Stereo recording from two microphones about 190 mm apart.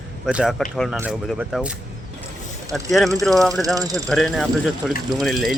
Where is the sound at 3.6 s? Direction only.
20° right (ahead or behind).